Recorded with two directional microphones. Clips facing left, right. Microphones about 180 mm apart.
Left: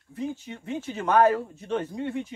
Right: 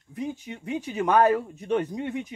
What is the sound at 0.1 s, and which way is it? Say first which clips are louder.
Speech: even; 15° right (ahead or behind).